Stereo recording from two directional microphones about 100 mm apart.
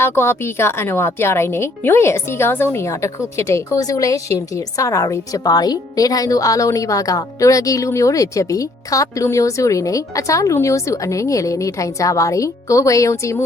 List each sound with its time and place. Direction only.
0.0 s a woman's voice: 25° left (ahead or behind)